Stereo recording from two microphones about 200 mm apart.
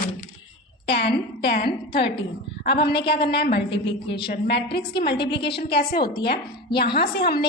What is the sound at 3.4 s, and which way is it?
A woman's voice, 55° left (ahead or behind).